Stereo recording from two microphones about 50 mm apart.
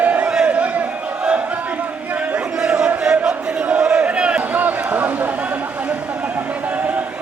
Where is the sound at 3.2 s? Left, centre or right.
Right.